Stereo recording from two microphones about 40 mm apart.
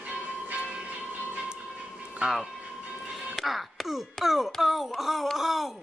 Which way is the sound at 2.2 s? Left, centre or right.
Right.